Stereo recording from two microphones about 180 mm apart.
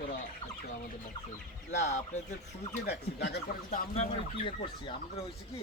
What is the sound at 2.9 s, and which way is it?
Speech, 70° left (ahead or behind).